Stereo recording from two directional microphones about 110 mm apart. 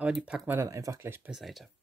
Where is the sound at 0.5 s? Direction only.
30° right (ahead or behind).